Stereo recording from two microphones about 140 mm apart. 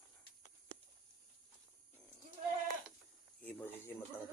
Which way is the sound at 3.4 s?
10° left (ahead or behind).